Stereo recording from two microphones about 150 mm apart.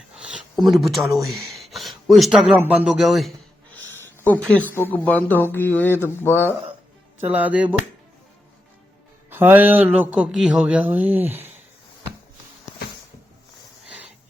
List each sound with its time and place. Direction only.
0.2 s speech: centre (ahead or behind); by 6.6 s 15° left (ahead or behind)
7.2 s a man's voice: 10° right (ahead or behind)
9.3 s a man's voice: 15° right (ahead or behind)